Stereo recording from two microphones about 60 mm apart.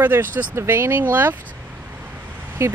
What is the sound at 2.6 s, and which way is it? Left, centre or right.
Speech, right.